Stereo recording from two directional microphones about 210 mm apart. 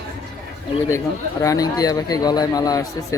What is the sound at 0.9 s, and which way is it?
Speech, 15° left (ahead or behind).